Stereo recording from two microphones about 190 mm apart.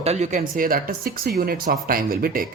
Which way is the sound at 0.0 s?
35° right (ahead or behind).